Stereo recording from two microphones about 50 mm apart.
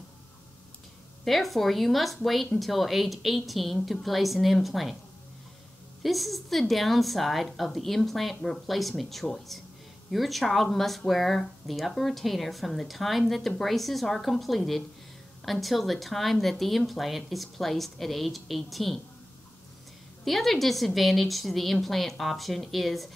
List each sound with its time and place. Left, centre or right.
1.2 s speech: centre
6.0 s speech: centre
20.2 s speech: centre